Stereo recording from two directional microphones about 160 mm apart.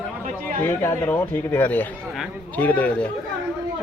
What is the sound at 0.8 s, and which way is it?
Speech, 15° left (ahead or behind).